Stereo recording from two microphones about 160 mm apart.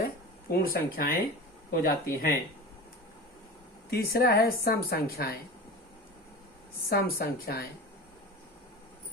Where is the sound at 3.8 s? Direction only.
70° left (ahead or behind).